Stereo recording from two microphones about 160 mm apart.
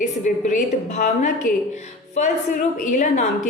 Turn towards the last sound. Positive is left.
turn(degrees=50)  # may be behind; listen again after turning